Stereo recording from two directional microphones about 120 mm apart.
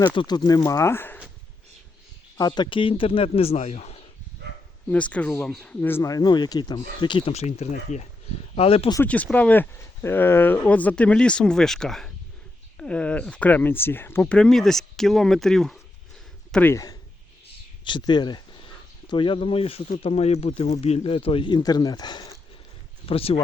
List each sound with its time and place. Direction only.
0.0 s speech: 35° left (ahead or behind); by 1.2 s 15° left (ahead or behind)
2.4 s speech: 35° left (ahead or behind); by 4.0 s 60° left (ahead or behind)
4.9 s speech: 10° left (ahead or behind)
6.0 s speech: 30° left (ahead or behind)
7.3 s speech: 60° left (ahead or behind)
8.5 s speech: 55° left (ahead or behind)
9.0 s speech: 10° left (ahead or behind)
16.5 s speech: 15° left (ahead or behind)
16.7 s speech: 30° left (ahead or behind)
23.0 s speech: 55° left (ahead or behind)